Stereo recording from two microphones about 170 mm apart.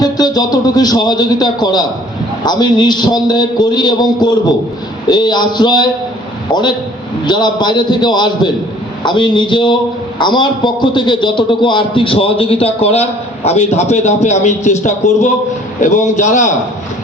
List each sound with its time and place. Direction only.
0.0 s a man's voice: 25° left (ahead or behind); by 16.5 s 45° left (ahead or behind)